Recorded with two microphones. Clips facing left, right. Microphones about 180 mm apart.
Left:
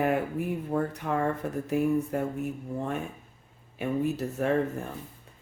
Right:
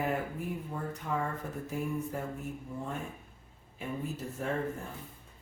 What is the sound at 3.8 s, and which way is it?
Speech, 70° left (ahead or behind).